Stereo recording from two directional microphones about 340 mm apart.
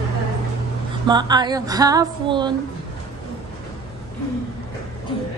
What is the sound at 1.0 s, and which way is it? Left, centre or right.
Speech, centre.